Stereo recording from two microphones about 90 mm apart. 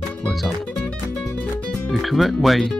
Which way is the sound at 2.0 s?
Centre (ahead or behind).